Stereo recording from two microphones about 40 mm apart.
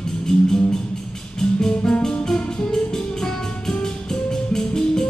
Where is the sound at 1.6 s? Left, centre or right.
Left.